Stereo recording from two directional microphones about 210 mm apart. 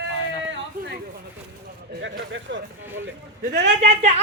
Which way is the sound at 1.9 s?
55° right (ahead or behind).